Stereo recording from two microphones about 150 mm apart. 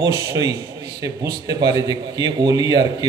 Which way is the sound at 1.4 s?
30° right (ahead or behind).